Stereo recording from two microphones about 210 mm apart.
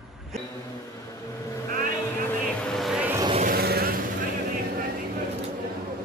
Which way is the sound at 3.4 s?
45° right (ahead or behind).